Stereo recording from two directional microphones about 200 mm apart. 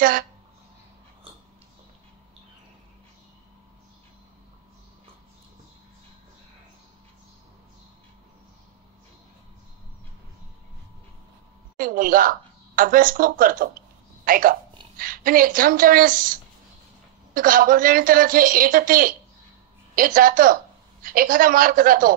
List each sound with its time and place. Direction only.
11.8 s a woman's voice: 45° right (ahead or behind)